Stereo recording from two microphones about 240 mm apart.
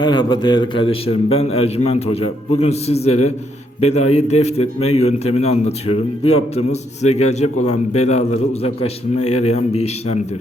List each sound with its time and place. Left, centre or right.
0.0 s a man's voice: centre
9.1 s speech: left
9.4 s a man's voice: left